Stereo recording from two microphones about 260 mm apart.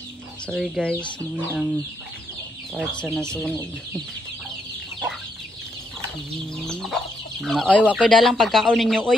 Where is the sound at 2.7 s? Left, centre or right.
Centre.